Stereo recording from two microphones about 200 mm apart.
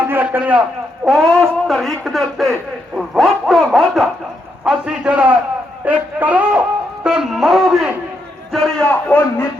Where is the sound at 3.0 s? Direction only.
Centre (ahead or behind).